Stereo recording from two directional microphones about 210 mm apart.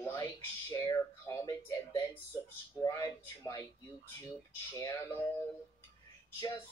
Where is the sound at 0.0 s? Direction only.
15° left (ahead or behind).